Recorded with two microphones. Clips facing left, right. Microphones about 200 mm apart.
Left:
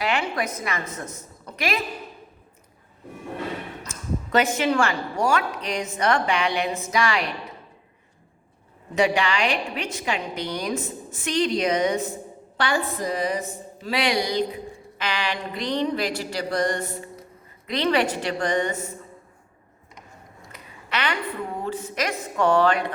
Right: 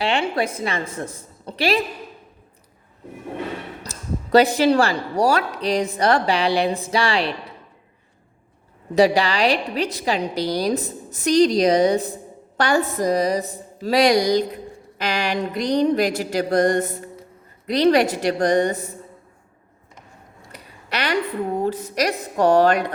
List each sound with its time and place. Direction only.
0.0 s a woman's voice: 30° right (ahead or behind)
3.8 s speech: 35° right (ahead or behind)
9.0 s speech: 35° right (ahead or behind)
20.9 s speech: 40° right (ahead or behind)